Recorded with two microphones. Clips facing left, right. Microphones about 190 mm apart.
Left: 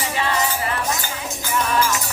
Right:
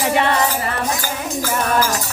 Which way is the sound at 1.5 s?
50° right (ahead or behind).